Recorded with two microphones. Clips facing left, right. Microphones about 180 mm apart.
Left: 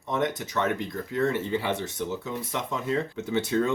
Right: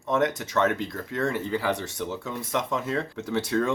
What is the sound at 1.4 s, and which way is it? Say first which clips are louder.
Speech: right 1 dB; 25° left (ahead or behind).